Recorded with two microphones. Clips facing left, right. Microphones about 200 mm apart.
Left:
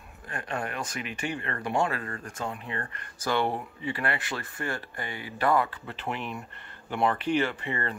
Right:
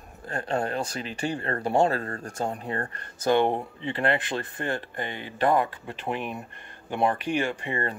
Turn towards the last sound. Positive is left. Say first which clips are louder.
# even
turn(degrees=-15)  # may be behind; listen again after turning